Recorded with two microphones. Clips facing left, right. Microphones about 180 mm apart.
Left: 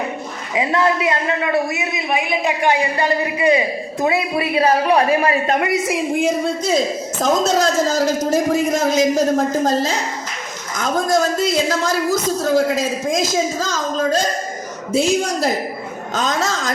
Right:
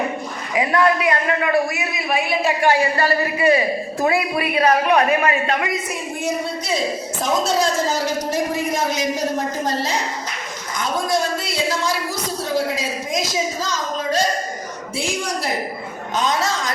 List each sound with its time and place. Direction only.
0.5 s a man's voice: 25° left (ahead or behind); by 5.6 s 40° left (ahead or behind)
5.6 s a woman's voice: 85° left
6.7 s a woman's voice: 45° left (ahead or behind)